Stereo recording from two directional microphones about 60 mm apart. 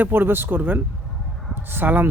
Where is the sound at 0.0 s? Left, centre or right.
Right.